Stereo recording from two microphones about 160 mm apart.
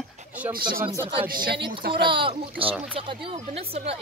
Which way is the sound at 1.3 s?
65° right (ahead or behind).